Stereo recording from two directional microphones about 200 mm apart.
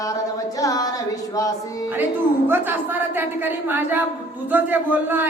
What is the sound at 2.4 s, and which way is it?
Speech, 10° right (ahead or behind).